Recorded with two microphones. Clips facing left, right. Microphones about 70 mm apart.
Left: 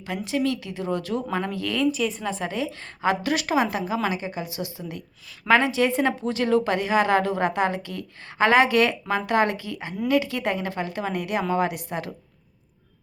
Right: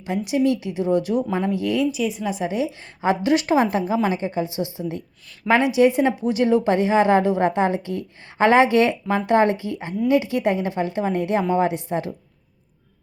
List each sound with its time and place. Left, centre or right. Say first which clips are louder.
0.3 s a woman's voice: right 5 dB; right
1.9 s a woman's voice: right 2 dB; centre; by 11.9 s right